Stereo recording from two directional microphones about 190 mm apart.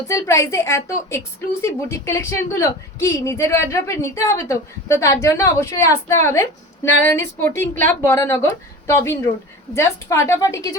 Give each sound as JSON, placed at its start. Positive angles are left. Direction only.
{"t": 0.1, "sound": "a woman's voice", "side_deg": 15}